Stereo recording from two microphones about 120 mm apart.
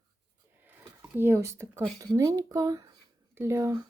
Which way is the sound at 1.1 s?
20° right (ahead or behind).